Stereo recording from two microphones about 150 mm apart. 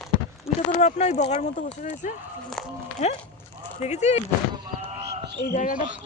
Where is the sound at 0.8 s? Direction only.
50° left (ahead or behind).